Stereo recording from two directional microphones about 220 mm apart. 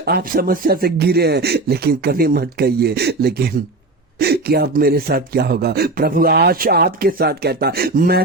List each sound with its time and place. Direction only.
0.0 s speech: 45° right (ahead or behind)